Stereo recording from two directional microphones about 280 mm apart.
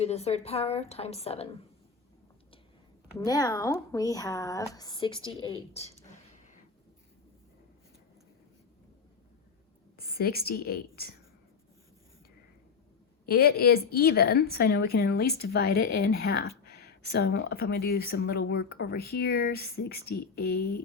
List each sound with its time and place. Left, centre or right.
0.0 s a woman's voice: left
3.2 s a woman's voice: centre
10.0 s a woman's voice: left
13.2 s speech: left